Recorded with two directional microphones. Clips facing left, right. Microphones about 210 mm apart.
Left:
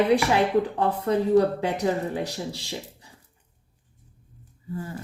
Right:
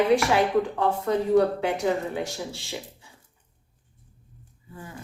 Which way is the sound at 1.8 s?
35° left (ahead or behind).